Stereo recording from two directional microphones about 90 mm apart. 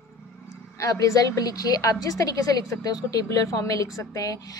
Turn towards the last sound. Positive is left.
turn(degrees=40)  # may be behind; listen again after turning